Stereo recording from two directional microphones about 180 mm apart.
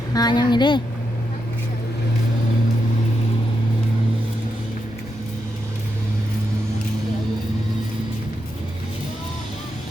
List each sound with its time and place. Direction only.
0.1 s a woman's voice: 20° left (ahead or behind)